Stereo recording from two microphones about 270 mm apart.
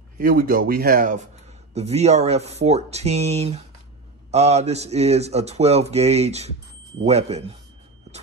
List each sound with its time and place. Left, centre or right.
0.2 s speech: right